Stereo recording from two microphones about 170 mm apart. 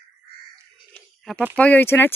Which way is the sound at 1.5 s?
10° left (ahead or behind).